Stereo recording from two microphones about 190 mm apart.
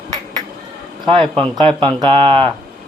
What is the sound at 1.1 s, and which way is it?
Speech, 30° right (ahead or behind).